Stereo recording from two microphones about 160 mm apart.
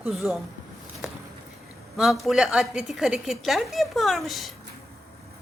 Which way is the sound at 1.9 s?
Centre (ahead or behind).